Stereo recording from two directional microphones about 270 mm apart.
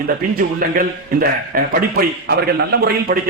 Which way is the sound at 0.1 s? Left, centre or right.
Right.